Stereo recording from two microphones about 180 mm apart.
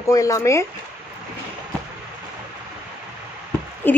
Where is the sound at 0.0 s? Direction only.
15° left (ahead or behind).